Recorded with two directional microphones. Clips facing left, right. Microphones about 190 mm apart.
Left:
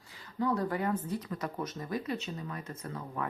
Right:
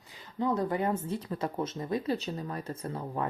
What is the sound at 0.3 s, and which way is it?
Speech, 20° right (ahead or behind).